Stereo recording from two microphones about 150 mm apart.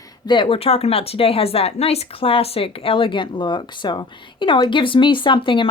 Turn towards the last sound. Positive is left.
turn(degrees=35)  # may be behind; listen again after turning